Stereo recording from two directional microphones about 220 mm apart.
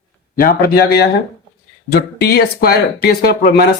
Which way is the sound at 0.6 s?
45° left (ahead or behind).